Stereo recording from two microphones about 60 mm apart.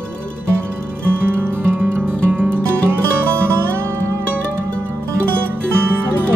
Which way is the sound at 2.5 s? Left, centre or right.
Right.